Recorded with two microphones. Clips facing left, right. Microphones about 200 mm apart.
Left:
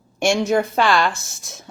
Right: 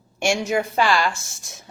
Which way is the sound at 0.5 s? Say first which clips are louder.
Left 3 dB; 55° left (ahead or behind).